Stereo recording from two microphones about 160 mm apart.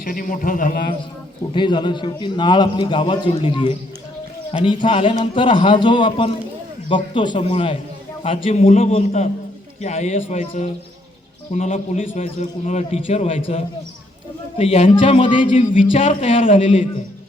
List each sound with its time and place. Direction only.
0.0 s a man's voice: 60° left (ahead or behind)
1.5 s a man's voice: 30° left (ahead or behind)
3.2 s speech: 40° left (ahead or behind)
3.5 s a man's voice: 30° left (ahead or behind); by 10.4 s 50° left (ahead or behind)
11.5 s a man's voice: 45° left (ahead or behind); by 15.5 s 30° left (ahead or behind)
15.9 s a man's voice: 50° left (ahead or behind)
16.3 s speech: 35° left (ahead or behind)